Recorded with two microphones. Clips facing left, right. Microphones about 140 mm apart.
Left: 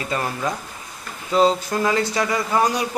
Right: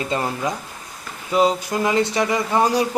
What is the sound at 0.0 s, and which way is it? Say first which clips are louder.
Speech: right 1 dB; 20° right (ahead or behind).